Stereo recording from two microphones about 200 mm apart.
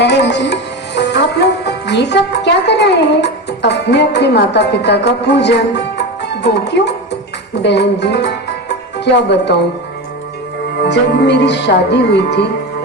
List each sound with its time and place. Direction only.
0.0 s sitar: 60° left (ahead or behind)
7.6 s speech: 60° left (ahead or behind)
10.8 s speech: 60° left (ahead or behind)